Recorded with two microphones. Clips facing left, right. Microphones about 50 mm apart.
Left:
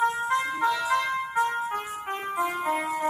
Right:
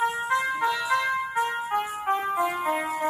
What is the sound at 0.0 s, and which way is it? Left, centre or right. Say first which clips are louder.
Music: even; centre.